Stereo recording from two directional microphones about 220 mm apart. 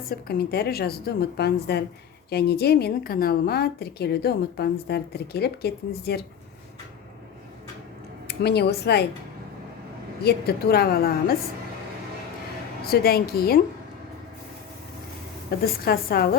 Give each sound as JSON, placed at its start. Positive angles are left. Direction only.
{"t": 0.1, "sound": "a woman's voice", "side_deg": 45}
{"t": 8.3, "sound": "a woman's voice", "side_deg": 45}
{"t": 10.2, "sound": "a woman's voice", "side_deg": 45}
{"t": 12.9, "sound": "a woman's voice", "side_deg": 45}
{"t": 15.4, "sound": "a woman's voice", "side_deg": 45}